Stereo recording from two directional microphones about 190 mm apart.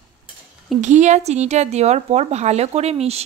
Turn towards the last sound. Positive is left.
turn(degrees=-35)  # may be behind; listen again after turning